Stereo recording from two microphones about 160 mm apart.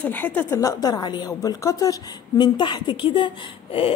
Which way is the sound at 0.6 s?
25° left (ahead or behind).